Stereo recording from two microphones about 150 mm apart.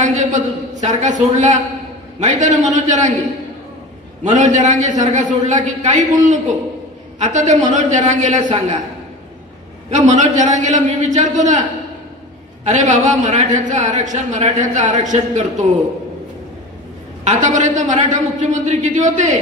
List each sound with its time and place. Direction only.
0.0 s a man's voice: 55° right (ahead or behind)
4.2 s a man's voice: 50° right (ahead or behind)
9.8 s a man's voice: 55° right (ahead or behind)
12.6 s a man's voice: 55° right (ahead or behind)
17.2 s a man's voice: 55° right (ahead or behind)